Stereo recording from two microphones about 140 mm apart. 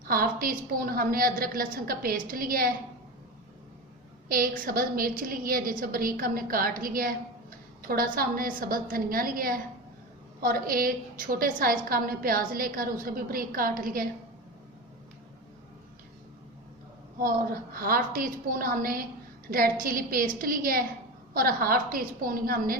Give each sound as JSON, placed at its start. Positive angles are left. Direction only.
{"t": 0.0, "sound": "a woman's voice", "side_deg": -90}
{"t": 4.3, "sound": "a woman's voice", "side_deg": -85}
{"t": 11.9, "sound": "a woman's voice", "side_deg": -90}
{"t": 17.2, "sound": "a woman's voice", "side_deg": -90}